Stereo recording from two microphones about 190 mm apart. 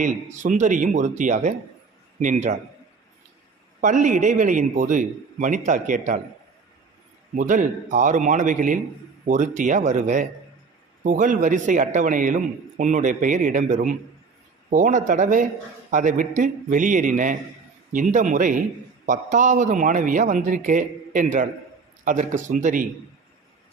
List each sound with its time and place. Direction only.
0.0 s a man's voice: 40° right (ahead or behind)
3.8 s speech: 40° right (ahead or behind)
7.3 s speech: 45° right (ahead or behind)